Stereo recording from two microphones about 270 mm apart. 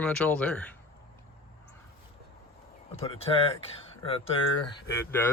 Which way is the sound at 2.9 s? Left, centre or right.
Left.